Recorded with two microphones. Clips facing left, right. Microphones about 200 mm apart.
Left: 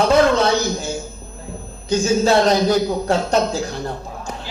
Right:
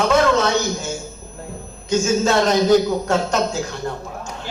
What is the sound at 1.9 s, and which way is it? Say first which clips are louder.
Speech: left 2 dB; 35° left (ahead or behind).